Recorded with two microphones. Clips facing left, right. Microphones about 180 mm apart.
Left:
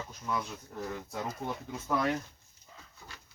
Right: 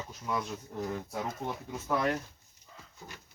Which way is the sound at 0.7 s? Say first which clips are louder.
Right 2 dB; 20° right (ahead or behind).